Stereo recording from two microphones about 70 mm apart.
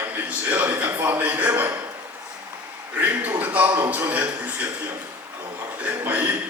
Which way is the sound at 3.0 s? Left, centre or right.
Right.